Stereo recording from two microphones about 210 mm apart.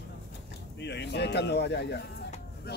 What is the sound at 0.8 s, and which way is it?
Speech, 55° left (ahead or behind).